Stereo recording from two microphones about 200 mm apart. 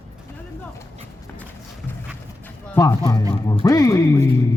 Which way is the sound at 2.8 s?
15° left (ahead or behind).